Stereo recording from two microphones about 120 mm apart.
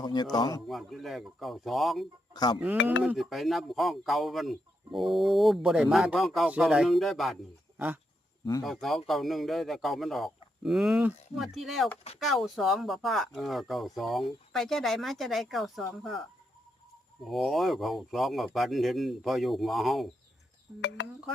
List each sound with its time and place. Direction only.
0.0 s speech: 35° left (ahead or behind)
0.7 s speech: centre (ahead or behind)
2.3 s speech: 35° left (ahead or behind)
2.6 s speech: 10° right (ahead or behind)
3.2 s speech: centre (ahead or behind)
8.6 s speech: centre (ahead or behind)
17.2 s speech: centre (ahead or behind)